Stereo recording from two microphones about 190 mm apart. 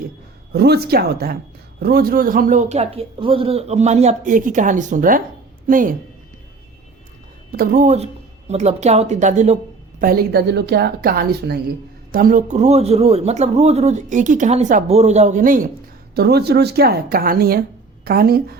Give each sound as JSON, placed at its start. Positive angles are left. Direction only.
{"t": 0.5, "sound": "a woman's voice", "side_deg": -55}
{"t": 7.5, "sound": "speech", "side_deg": -50}
{"t": 10.0, "sound": "a woman's voice", "side_deg": -55}
{"t": 12.1, "sound": "speech", "side_deg": -45}
{"t": 16.1, "sound": "a woman's voice", "side_deg": -55}